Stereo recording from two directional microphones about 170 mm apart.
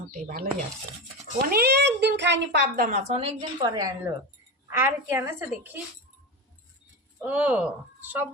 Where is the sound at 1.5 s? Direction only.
70° right (ahead or behind); by 2.6 s 90° right.